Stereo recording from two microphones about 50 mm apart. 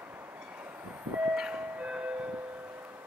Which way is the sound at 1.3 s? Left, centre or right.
Centre.